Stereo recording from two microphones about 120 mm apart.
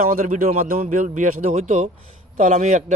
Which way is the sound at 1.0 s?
90° right.